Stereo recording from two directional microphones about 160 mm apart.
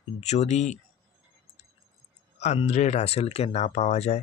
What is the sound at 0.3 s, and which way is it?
Speech, 45° left (ahead or behind).